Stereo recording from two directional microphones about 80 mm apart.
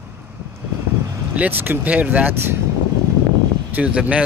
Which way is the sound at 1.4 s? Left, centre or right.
Right.